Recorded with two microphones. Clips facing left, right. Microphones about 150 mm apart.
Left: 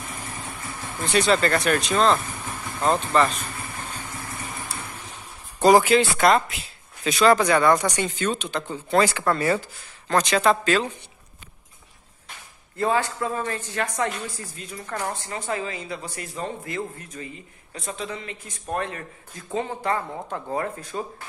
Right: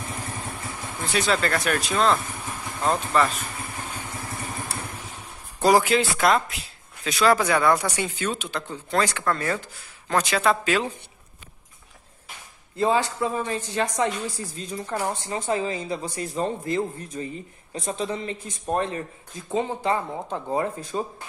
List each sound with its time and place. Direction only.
1.0 s speech: centre (ahead or behind)
5.6 s speech: centre (ahead or behind)
10.0 s speech: 5° right (ahead or behind)
12.7 s speech: 20° right (ahead or behind)
14.6 s speech: 35° right (ahead or behind)
14.9 s speech: 15° right (ahead or behind)